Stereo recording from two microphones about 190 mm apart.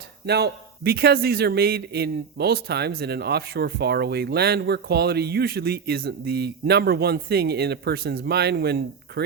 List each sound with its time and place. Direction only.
0.3 s a man's voice: 60° right (ahead or behind)